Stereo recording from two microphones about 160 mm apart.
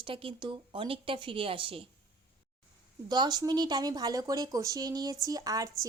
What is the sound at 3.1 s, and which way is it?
Speech, 25° right (ahead or behind).